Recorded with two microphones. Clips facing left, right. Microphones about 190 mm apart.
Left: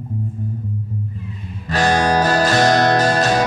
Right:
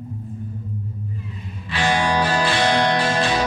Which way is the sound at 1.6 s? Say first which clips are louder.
Left 4 dB; 45° left (ahead or behind).